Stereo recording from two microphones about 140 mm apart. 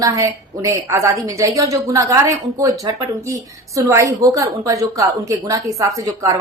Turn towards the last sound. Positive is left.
turn(degrees=-25)  # may be behind; listen again after turning